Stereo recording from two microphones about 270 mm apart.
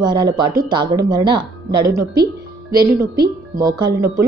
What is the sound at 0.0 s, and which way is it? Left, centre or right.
A woman's voice, centre.